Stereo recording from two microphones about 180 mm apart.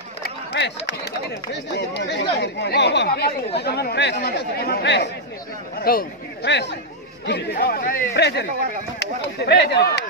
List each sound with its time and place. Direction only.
0.2 s a sound: 70° left (ahead or behind)
1.5 s speech: 70° left (ahead or behind)
5.8 s speech: 55° left (ahead or behind)
7.6 s speech: 55° left (ahead or behind)